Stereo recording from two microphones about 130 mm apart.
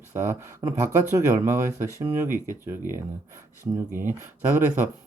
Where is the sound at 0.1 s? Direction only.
20° right (ahead or behind).